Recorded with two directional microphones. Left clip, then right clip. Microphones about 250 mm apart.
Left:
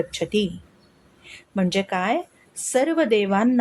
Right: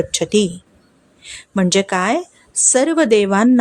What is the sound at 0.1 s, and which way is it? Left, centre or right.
A woman's voice, right.